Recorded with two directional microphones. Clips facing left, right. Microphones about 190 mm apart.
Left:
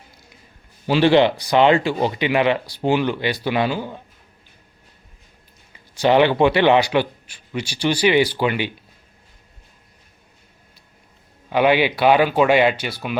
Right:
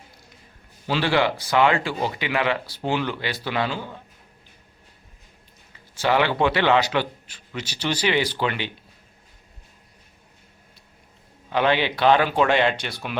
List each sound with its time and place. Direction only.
0.9 s speech: 20° left (ahead or behind)
5.9 s speech: 20° left (ahead or behind)
11.4 s speech: 10° left (ahead or behind)